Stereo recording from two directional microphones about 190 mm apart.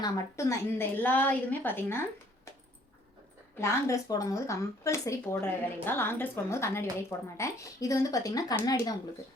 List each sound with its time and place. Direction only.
0.0 s speech: 15° left (ahead or behind)
3.6 s speech: 15° left (ahead or behind)